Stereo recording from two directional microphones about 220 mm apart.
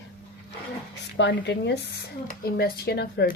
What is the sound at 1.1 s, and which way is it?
Speech, 50° left (ahead or behind).